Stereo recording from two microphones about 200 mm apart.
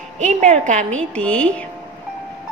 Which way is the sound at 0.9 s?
5° left (ahead or behind).